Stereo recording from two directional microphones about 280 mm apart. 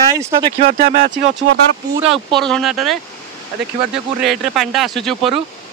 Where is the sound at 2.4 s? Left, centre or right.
Centre.